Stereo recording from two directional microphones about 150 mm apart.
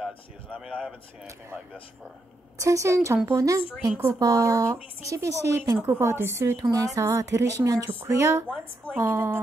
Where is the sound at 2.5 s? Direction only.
20° right (ahead or behind).